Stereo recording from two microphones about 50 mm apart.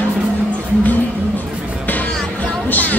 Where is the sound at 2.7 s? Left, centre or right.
Left.